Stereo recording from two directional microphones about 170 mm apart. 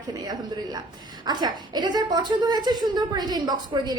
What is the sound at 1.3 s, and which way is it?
A woman's voice, 25° right (ahead or behind).